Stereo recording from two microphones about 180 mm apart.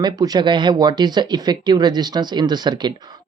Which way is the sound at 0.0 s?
25° right (ahead or behind).